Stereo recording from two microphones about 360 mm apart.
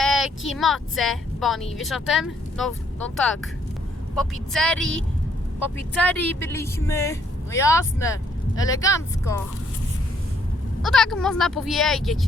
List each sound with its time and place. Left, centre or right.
0.0 s speech: centre
10.8 s speech: centre